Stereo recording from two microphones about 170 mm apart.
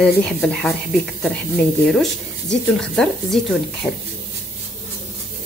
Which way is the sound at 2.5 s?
5° left (ahead or behind).